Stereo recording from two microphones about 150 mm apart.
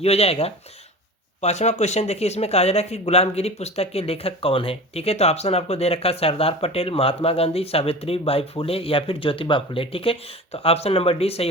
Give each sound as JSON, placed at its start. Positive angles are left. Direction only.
{"t": 0.0, "sound": "speech", "side_deg": 45}